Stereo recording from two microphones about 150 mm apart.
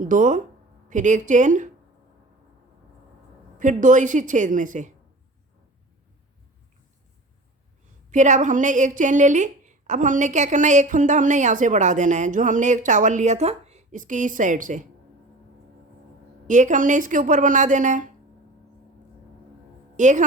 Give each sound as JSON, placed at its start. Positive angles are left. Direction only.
{"t": 0.0, "sound": "a woman's voice", "side_deg": -60}
{"t": 3.6, "sound": "a woman's voice", "side_deg": -60}
{"t": 8.1, "sound": "a woman's voice", "side_deg": -55}
{"t": 16.5, "sound": "a woman's voice", "side_deg": -55}
{"t": 20.0, "sound": "a woman's voice", "side_deg": -55}